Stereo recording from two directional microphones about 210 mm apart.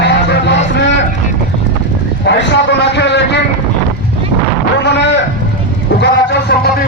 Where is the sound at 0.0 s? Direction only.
55° left (ahead or behind).